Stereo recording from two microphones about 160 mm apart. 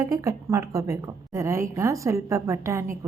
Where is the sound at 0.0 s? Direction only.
20° right (ahead or behind).